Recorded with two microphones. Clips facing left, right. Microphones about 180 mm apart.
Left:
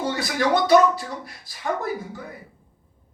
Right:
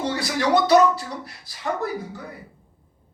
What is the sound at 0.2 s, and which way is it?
Speech, 50° left (ahead or behind).